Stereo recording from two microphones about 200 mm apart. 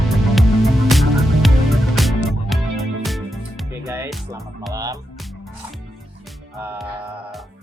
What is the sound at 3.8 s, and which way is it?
Music, 10° right (ahead or behind).